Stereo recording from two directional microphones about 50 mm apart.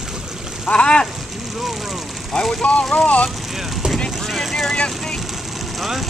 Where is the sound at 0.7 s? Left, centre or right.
Centre.